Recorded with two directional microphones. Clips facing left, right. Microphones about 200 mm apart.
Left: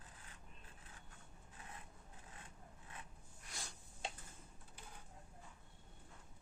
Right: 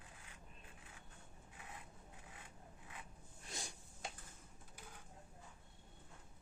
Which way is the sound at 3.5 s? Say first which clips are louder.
Right 3 dB; 20° right (ahead or behind).